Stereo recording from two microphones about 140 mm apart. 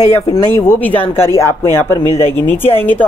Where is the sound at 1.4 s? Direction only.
20° left (ahead or behind).